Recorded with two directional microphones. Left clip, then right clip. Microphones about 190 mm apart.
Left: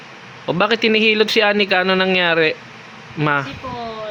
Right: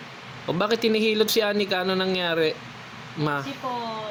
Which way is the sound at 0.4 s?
15° left (ahead or behind).